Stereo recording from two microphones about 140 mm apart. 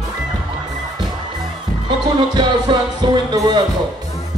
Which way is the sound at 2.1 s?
30° right (ahead or behind).